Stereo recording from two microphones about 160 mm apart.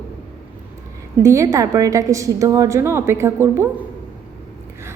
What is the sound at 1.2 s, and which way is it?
A woman's voice, 20° right (ahead or behind).